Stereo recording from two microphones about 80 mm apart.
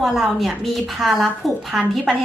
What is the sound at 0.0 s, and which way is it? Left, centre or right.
A woman's voice, centre.